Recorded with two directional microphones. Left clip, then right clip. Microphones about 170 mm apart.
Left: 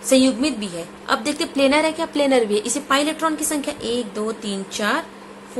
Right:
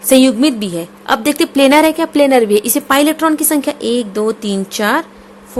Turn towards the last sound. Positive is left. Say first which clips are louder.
# right 7 dB
turn(degrees=-50)  # may be behind; listen again after turning